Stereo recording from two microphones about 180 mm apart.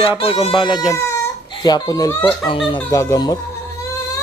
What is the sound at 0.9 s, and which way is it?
Speech, 15° left (ahead or behind).